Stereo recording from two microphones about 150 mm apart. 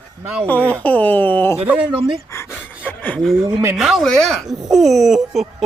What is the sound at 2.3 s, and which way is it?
Pant, 20° left (ahead or behind).